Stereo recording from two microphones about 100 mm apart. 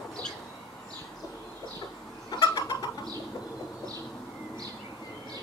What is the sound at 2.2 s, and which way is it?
Chicken, 40° left (ahead or behind).